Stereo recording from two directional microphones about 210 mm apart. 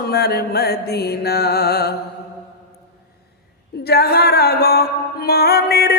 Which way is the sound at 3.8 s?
50° left (ahead or behind).